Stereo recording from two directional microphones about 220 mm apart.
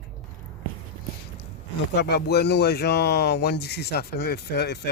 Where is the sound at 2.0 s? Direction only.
50° left (ahead or behind).